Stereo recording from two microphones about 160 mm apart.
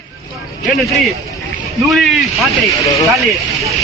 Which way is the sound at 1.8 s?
Centre (ahead or behind).